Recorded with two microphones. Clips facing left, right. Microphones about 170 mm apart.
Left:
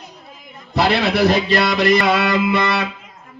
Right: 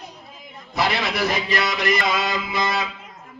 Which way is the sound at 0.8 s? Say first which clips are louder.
Left 7 dB; 65° left (ahead or behind).